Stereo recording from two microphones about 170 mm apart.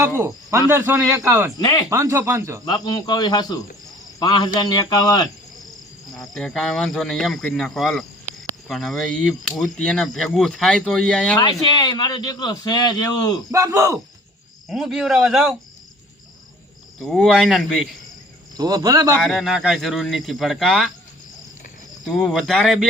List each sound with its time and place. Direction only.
0.2 s a man's voice: 20° right (ahead or behind)
1.5 s a man's voice: 25° left (ahead or behind)
1.9 s a man's voice: 20° right (ahead or behind)
2.6 s a man's voice: 25° left (ahead or behind)
6.1 s speech: centre (ahead or behind)
11.7 s a man's voice: 25° left (ahead or behind)
13.5 s a man's voice: 20° right (ahead or behind)
14.7 s speech: 5° right (ahead or behind)
17.0 s speech: centre (ahead or behind)
18.5 s a man's voice: 25° right (ahead or behind)
19.2 s speech: centre (ahead or behind)
22.0 s speech: centre (ahead or behind)